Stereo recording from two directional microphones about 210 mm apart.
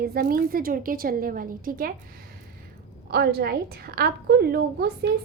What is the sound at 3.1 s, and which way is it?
A woman's voice, 45° right (ahead or behind).